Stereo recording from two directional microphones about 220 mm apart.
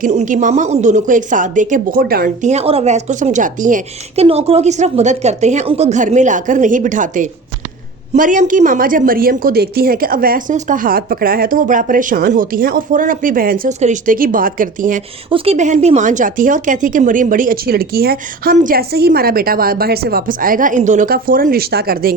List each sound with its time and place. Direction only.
0.0 s a woman's voice: 35° right (ahead or behind)